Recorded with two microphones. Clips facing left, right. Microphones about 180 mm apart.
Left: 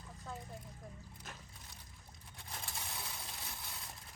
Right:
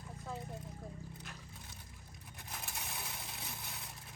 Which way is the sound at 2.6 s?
15° right (ahead or behind).